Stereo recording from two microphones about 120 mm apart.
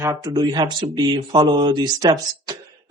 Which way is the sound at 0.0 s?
30° right (ahead or behind).